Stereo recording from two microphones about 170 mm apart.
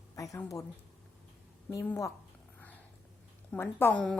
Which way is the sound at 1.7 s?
15° left (ahead or behind).